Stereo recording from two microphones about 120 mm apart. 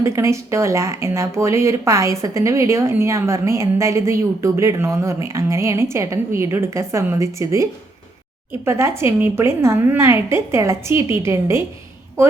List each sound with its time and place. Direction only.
0.0 s speech: 25° right (ahead or behind)